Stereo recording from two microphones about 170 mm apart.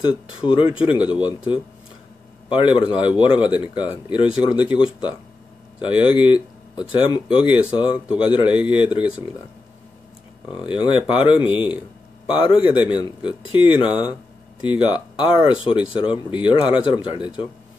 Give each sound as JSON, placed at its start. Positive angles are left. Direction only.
{"t": 0.0, "sound": "speech", "side_deg": 30}
{"t": 10.5, "sound": "speech", "side_deg": 30}